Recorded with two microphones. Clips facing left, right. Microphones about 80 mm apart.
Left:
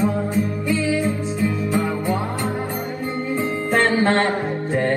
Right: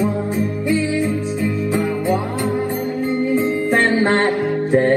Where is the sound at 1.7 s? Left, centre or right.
Right.